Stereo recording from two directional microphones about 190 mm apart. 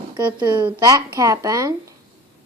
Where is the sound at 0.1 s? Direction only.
25° right (ahead or behind).